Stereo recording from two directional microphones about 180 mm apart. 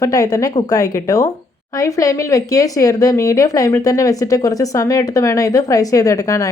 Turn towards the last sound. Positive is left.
turn(degrees=20)  # may be behind; listen again after turning